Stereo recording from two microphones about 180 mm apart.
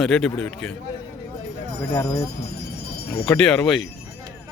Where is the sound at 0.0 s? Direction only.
5° left (ahead or behind).